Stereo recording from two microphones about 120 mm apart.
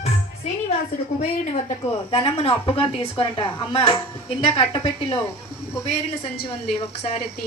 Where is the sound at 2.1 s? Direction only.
50° left (ahead or behind).